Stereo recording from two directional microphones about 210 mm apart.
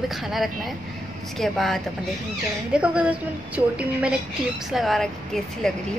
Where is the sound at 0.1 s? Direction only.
Centre (ahead or behind).